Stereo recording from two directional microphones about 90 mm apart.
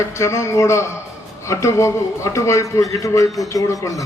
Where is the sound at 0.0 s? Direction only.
30° left (ahead or behind).